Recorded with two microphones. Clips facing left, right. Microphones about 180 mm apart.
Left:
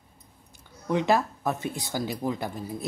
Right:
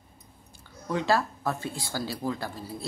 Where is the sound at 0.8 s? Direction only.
20° left (ahead or behind).